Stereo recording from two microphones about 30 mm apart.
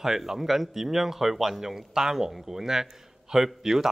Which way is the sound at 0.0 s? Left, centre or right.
Centre.